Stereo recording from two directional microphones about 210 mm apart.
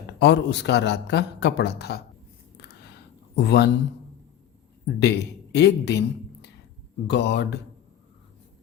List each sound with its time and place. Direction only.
0.2 s a man's voice: 55° left (ahead or behind)
3.3 s a man's voice: 55° left (ahead or behind)
4.9 s a man's voice: 55° left (ahead or behind)